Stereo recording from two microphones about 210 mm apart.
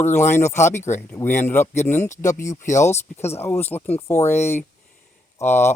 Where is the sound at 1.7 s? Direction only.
35° left (ahead or behind).